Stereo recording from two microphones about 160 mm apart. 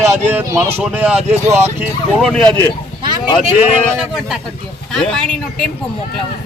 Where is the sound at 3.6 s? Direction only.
5° right (ahead or behind).